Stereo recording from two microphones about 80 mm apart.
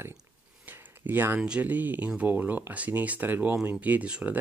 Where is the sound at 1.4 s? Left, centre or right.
Centre.